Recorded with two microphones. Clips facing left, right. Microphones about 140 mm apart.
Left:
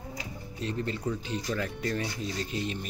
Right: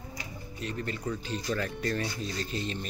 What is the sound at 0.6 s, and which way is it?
Speech, 25° left (ahead or behind).